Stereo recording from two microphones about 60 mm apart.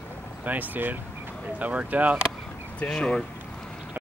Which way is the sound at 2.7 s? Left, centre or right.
Centre.